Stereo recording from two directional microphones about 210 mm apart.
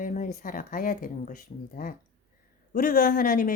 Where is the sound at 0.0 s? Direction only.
40° left (ahead or behind).